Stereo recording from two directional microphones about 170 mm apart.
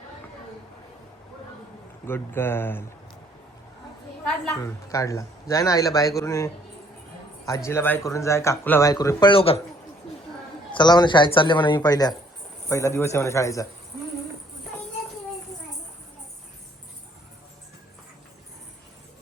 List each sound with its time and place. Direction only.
2.0 s a man's voice: 15° left (ahead or behind)
4.6 s a man's voice: 20° left (ahead or behind)
10.7 s a man's voice: 25° left (ahead or behind)